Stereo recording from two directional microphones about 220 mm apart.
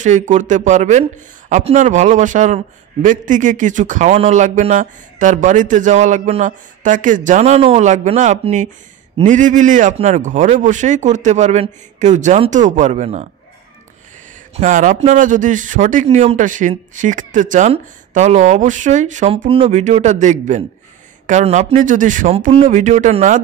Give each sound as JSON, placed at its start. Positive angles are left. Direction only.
{"t": 0.0, "sound": "speech", "side_deg": -35}
{"t": 14.5, "sound": "speech", "side_deg": -35}